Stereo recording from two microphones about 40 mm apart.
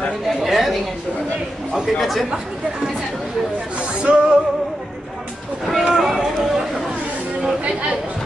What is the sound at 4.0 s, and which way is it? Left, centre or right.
Music, right.